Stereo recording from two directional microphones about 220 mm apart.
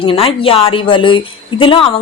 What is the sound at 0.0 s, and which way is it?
A woman's voice, 25° left (ahead or behind).